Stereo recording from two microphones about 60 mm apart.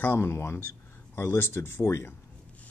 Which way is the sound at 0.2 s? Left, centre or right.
Left.